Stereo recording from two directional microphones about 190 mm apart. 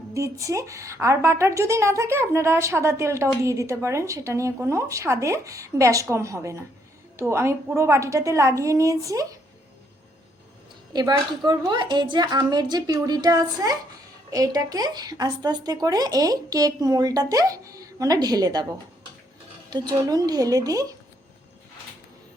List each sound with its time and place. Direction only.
0.1 s a woman's voice: 15° right (ahead or behind)
10.9 s speech: 20° right (ahead or behind)
19.7 s speech: 20° right (ahead or behind)